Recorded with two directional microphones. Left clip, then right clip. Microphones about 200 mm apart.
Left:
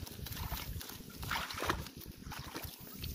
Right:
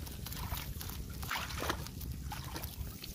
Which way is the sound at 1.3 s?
30° right (ahead or behind).